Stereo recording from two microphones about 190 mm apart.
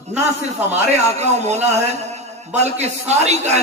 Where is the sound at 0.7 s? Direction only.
35° right (ahead or behind).